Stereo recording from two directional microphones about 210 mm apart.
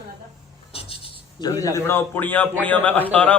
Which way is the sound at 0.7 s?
25° left (ahead or behind).